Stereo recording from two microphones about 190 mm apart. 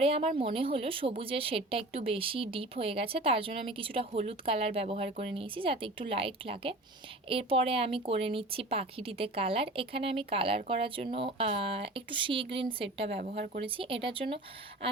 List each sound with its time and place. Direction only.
0.0 s speech: 30° right (ahead or behind)
13.4 s speech: 50° right (ahead or behind)
13.7 s speech: 30° right (ahead or behind)